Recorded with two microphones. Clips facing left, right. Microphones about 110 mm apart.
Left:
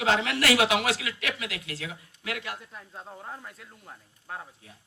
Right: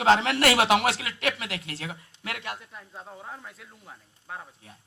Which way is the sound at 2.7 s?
Centre (ahead or behind).